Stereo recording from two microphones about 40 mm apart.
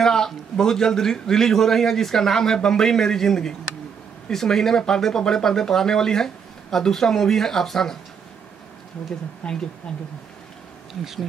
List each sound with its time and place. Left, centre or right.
0.0 s speech: centre
9.4 s speech: left